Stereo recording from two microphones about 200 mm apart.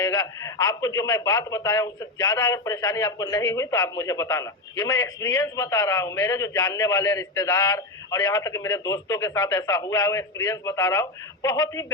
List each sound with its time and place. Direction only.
0.0 s a man's voice: 15° left (ahead or behind)